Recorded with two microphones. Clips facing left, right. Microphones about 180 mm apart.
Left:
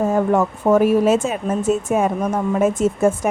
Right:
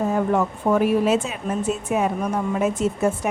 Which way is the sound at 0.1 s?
45° left (ahead or behind).